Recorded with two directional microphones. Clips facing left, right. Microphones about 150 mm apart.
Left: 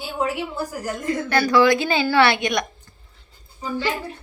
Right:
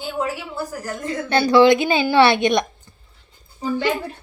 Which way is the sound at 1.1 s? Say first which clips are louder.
Right 2 dB; 25° right (ahead or behind).